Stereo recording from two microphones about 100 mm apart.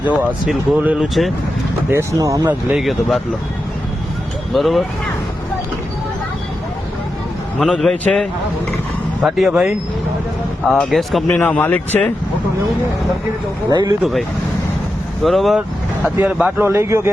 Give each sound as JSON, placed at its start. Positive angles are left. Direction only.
{"t": 0.2, "sound": "speech", "side_deg": -15}
{"t": 0.9, "sound": "speech", "side_deg": 0}
{"t": 1.9, "sound": "speech", "side_deg": -30}
{"t": 2.7, "sound": "speech", "side_deg": 0}
{"t": 4.5, "sound": "speech", "side_deg": 0}
{"t": 7.6, "sound": "a man's voice", "side_deg": 0}
{"t": 10.7, "sound": "speech", "side_deg": 0}
{"t": 11.3, "sound": "a man's voice", "side_deg": 15}
{"t": 13.7, "sound": "speech", "side_deg": -40}
{"t": 14.0, "sound": "speech", "side_deg": 0}
{"t": 16.0, "sound": "a man's voice", "side_deg": -15}